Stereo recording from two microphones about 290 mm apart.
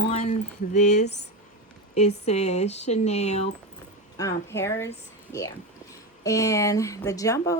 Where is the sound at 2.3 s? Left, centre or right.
Left.